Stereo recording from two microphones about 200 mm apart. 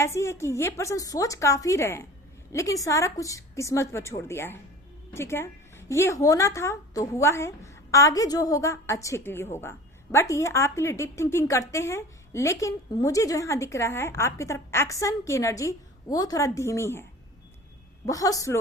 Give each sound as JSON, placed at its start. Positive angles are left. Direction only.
{"t": 0.0, "sound": "speech", "side_deg": 15}